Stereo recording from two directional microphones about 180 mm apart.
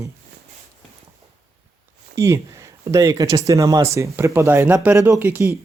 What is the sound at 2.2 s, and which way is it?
Speech, 15° right (ahead or behind).